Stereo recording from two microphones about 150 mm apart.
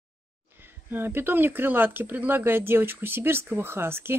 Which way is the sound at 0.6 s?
15° right (ahead or behind).